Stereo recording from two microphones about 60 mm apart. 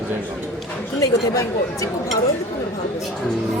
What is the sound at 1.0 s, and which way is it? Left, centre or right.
Speech, left.